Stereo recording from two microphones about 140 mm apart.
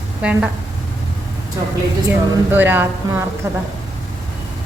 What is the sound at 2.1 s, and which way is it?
A woman's voice, 15° right (ahead or behind).